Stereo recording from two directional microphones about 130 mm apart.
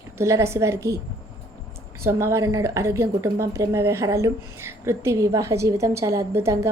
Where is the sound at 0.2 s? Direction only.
20° right (ahead or behind).